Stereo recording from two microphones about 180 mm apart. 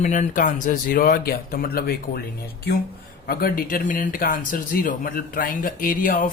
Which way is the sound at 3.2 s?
55° left (ahead or behind).